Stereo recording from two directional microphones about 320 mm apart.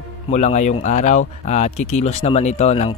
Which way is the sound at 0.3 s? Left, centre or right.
Left.